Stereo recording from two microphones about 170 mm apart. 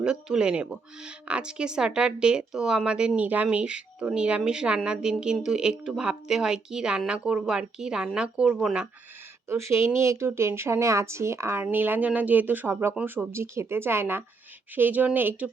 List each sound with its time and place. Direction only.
0.0 s speech: 5° right (ahead or behind)
9.5 s a woman's voice: 15° right (ahead or behind)